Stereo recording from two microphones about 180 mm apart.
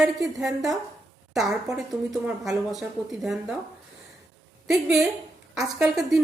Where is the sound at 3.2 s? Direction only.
Centre (ahead or behind).